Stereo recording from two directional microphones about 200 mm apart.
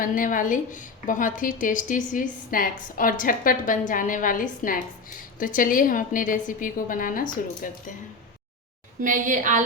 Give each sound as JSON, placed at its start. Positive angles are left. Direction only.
{"t": 0.0, "sound": "a woman's voice", "side_deg": 45}
{"t": 9.0, "sound": "a woman's voice", "side_deg": -40}